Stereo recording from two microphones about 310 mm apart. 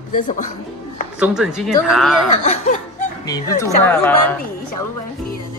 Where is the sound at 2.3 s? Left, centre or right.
Left.